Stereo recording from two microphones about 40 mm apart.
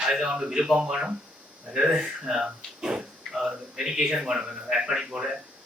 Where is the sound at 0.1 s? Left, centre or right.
Centre.